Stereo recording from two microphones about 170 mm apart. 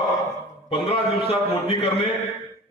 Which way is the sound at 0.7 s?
30° left (ahead or behind).